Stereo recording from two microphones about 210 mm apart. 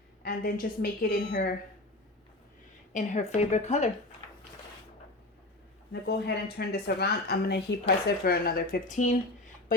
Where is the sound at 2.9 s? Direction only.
35° left (ahead or behind).